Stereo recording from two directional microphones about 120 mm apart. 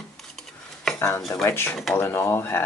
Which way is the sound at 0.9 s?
20° left (ahead or behind).